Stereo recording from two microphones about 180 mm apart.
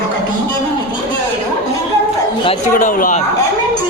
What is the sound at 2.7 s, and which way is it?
Speech, 50° left (ahead or behind).